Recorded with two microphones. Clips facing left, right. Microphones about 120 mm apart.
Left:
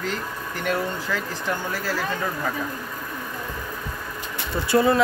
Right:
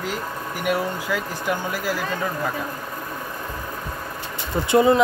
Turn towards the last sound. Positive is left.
turn(degrees=-20)  # may be behind; listen again after turning